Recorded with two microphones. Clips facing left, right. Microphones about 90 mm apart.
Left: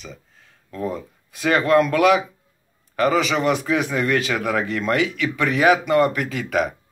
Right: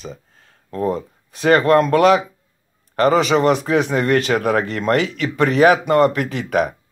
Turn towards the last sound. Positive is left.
turn(degrees=-45)  # may be behind; listen again after turning